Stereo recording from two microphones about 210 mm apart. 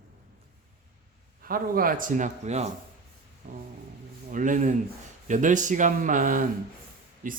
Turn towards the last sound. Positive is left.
turn(degrees=-40)  # may be behind; listen again after turning